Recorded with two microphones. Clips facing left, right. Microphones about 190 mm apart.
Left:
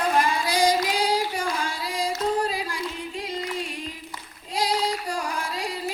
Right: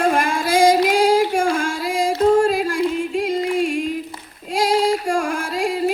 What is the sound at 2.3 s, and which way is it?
Yodeling, 50° right (ahead or behind).